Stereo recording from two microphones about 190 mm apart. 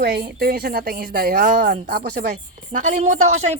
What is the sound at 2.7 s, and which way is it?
Speech, 40° right (ahead or behind).